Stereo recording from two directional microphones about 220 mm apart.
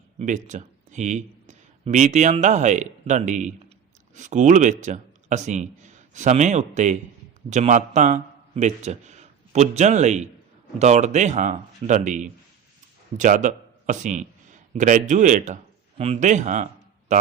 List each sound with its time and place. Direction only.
0.2 s a man's voice: 35° right (ahead or behind)